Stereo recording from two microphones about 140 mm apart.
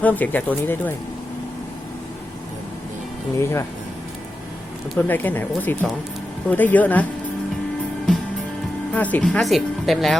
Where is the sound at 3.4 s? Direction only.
20° left (ahead or behind).